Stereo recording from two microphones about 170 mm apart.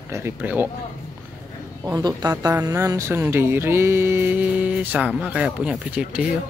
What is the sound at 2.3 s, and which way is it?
Music, 10° right (ahead or behind).